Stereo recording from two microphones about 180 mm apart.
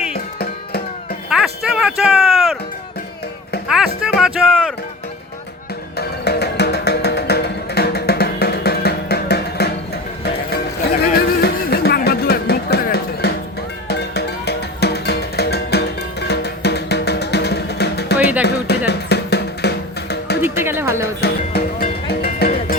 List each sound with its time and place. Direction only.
1.3 s music: centre (ahead or behind)
3.7 s music: 5° right (ahead or behind)
6.0 s music: 65° left (ahead or behind)
11.0 s music: 60° left (ahead or behind)
20.4 s a sound: 10° right (ahead or behind)
21.2 s music: 60° left (ahead or behind)